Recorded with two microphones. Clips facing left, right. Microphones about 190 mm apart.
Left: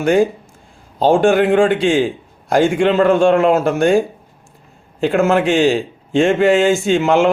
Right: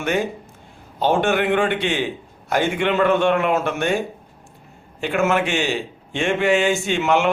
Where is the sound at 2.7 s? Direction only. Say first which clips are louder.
Left 5 dB; 30° left (ahead or behind).